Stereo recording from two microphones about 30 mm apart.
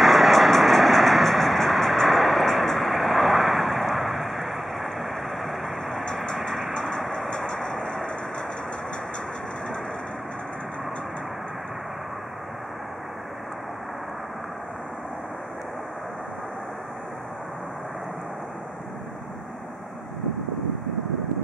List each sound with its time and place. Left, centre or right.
0.0 s vehicle: centre
7.2 s vehicle: left